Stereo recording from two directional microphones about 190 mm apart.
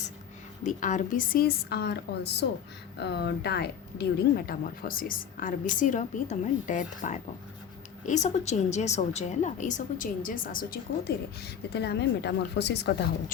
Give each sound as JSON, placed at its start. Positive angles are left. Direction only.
{"t": 0.6, "sound": "a woman's voice", "side_deg": 40}